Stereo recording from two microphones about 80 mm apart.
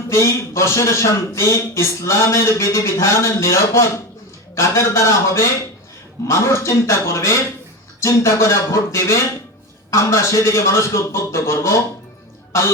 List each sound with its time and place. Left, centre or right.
0.1 s a man's voice: left